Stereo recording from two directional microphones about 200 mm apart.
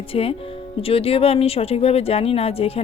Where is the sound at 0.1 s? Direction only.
30° left (ahead or behind).